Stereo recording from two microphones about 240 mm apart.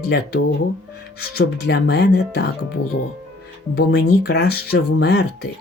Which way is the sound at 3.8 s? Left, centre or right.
Left.